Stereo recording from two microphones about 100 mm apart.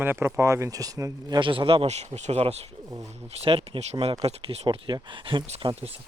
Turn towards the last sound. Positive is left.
turn(degrees=-75)  # may be behind; listen again after turning